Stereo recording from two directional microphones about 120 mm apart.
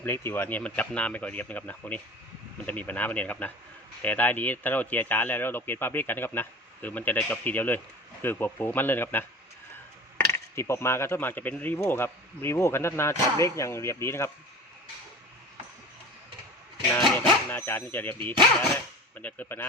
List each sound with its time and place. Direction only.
0.0 s speech: 20° left (ahead or behind)
17.2 s speech: 15° left (ahead or behind)